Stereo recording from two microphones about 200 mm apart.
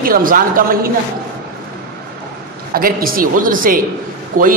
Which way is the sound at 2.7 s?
45° right (ahead or behind).